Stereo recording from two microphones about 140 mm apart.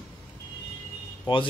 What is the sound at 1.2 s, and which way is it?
Speech, 35° left (ahead or behind).